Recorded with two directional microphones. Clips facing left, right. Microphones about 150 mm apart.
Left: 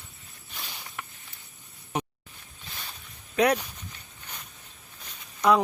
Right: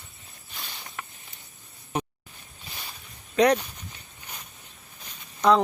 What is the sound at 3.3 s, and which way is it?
Speech, 5° left (ahead or behind).